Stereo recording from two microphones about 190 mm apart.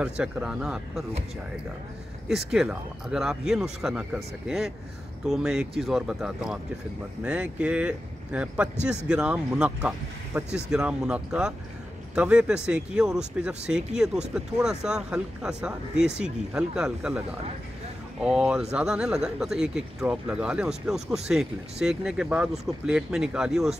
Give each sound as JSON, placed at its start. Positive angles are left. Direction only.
{"t": 0.0, "sound": "speech", "side_deg": -5}
{"t": 2.2, "sound": "speech", "side_deg": 0}
{"t": 18.2, "sound": "speech", "side_deg": -5}